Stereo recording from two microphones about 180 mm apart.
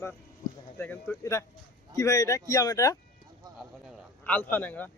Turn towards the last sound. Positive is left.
turn(degrees=10)  # may be behind; listen again after turning